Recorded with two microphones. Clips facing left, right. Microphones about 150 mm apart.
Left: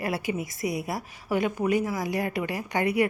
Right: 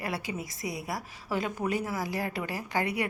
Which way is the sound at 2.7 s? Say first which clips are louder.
Left 6 dB; 20° left (ahead or behind).